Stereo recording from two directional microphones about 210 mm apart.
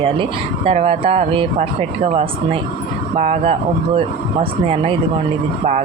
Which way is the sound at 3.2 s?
30° right (ahead or behind).